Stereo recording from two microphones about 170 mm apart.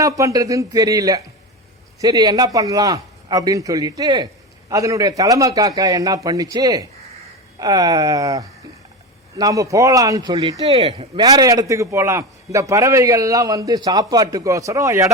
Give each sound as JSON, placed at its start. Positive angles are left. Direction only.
{"t": 0.0, "sound": "a man's voice", "side_deg": -20}
{"t": 10.7, "sound": "speech", "side_deg": -35}
{"t": 11.3, "sound": "a man's voice", "side_deg": -20}